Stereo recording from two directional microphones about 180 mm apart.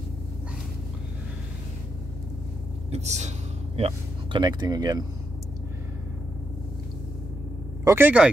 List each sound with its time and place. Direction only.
2.9 s speech: 40° right (ahead or behind); by 5.0 s 20° right (ahead or behind)
7.8 s speech: 15° right (ahead or behind)